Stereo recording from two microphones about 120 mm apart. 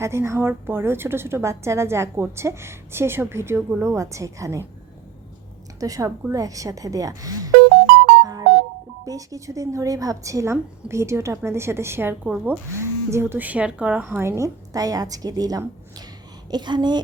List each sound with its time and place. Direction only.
0.0 s speech: 20° right (ahead or behind)
5.8 s speech: 30° right (ahead or behind)
8.2 s music: 30° right (ahead or behind)
9.0 s speech: 30° right (ahead or behind)